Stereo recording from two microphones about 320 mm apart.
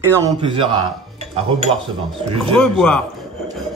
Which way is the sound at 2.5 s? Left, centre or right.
Centre.